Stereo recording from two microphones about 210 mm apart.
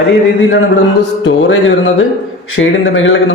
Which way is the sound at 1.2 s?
65° left (ahead or behind).